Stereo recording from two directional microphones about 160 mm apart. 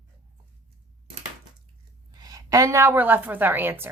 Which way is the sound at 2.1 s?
25° right (ahead or behind).